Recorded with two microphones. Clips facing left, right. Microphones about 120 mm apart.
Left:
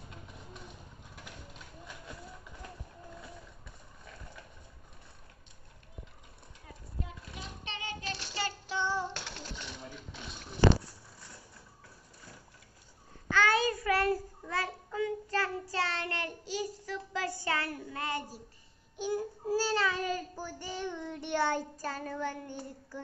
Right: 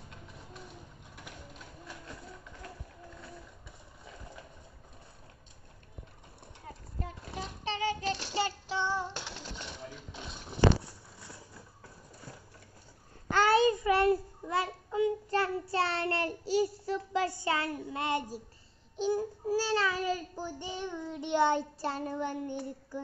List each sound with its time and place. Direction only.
7.2 s a sound: 30° right (ahead or behind)
8.1 s child singing: 25° right (ahead or behind)
8.7 s child singing: centre (ahead or behind)
13.3 s child singing: 40° right (ahead or behind)
13.6 s child singing: 20° right (ahead or behind)
18.9 s a sound: 25° right (ahead or behind)
19.4 s child singing: 5° right (ahead or behind)